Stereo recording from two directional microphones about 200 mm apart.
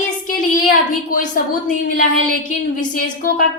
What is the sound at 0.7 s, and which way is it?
A woman's voice, 40° left (ahead or behind).